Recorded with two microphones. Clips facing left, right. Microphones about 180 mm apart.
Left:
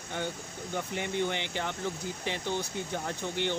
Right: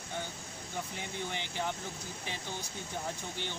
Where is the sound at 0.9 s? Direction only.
70° left (ahead or behind).